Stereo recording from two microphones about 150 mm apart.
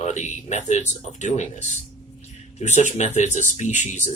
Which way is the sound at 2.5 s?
50° left (ahead or behind).